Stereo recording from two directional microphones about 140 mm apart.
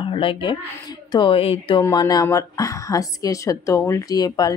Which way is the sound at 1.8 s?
25° left (ahead or behind).